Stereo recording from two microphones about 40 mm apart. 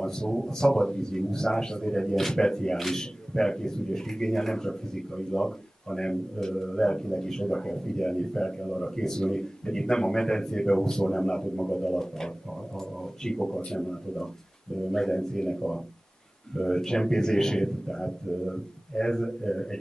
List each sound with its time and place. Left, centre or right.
0.0 s a man's voice: centre